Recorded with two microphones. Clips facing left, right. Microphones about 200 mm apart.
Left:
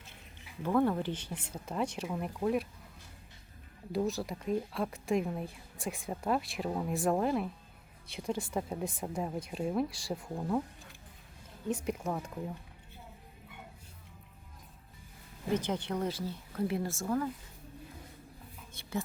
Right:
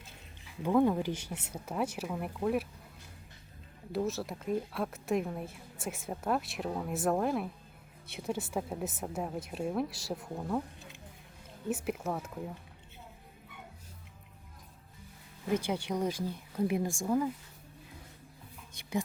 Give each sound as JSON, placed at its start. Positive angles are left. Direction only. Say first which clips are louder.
{"t": 0.6, "sound": "speech", "louder": "right 2 dB", "side_deg": -15}
{"t": 3.9, "sound": "a woman's voice", "louder": "left 1 dB", "side_deg": 0}
{"t": 11.7, "sound": "a woman's voice", "louder": "even", "side_deg": -5}
{"t": 15.5, "sound": "speech", "louder": "right 1 dB", "side_deg": -10}
{"t": 18.7, "sound": "a woman's voice", "louder": "right 3 dB", "side_deg": -15}